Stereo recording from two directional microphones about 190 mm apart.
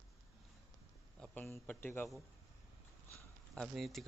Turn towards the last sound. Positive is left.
turn(degrees=0)  # may be behind; listen again after turning